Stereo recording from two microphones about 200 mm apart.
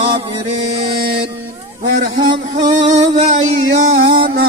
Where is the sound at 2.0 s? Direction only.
40° right (ahead or behind).